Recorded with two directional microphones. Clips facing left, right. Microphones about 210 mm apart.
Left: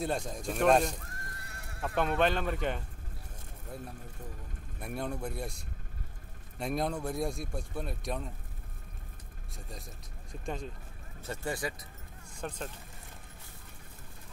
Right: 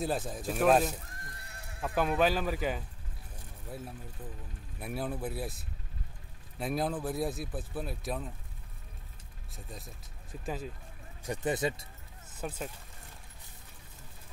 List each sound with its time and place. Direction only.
0.0 s speech: 5° right (ahead or behind)
1.7 s sheep: 20° right (ahead or behind)
2.0 s speech: 5° right (ahead or behind)
6.6 s speech: centre (ahead or behind)
9.6 s speech: centre (ahead or behind)
11.2 s speech: 20° right (ahead or behind)
12.4 s speech: 5° right (ahead or behind)